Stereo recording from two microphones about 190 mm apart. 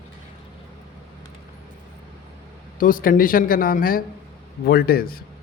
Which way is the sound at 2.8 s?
45° left (ahead or behind).